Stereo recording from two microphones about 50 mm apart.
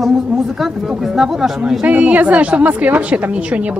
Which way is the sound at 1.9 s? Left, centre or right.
Right.